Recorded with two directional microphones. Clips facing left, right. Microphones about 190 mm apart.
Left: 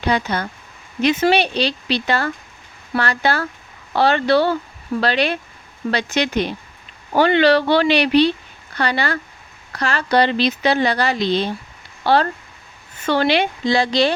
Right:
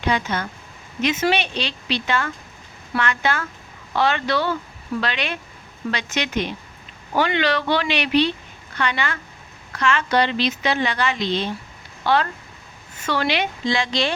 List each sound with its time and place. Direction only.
0.0 s speech: 35° left (ahead or behind)